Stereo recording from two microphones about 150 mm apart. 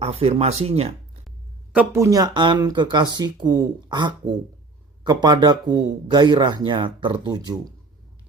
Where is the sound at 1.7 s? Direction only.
10° right (ahead or behind).